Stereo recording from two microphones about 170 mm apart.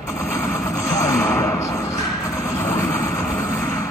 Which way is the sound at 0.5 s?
20° left (ahead or behind).